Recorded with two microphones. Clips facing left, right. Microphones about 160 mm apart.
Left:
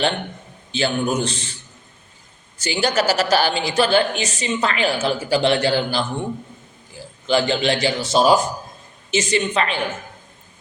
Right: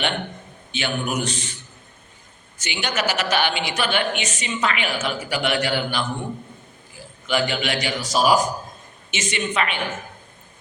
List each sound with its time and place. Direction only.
0.7 s a man's voice: 35° left (ahead or behind)
2.6 s a woman's voice: 35° left (ahead or behind)
7.3 s a man's voice: 30° left (ahead or behind)